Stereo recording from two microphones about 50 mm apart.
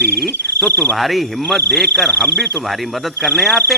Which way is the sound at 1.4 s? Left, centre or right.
Centre.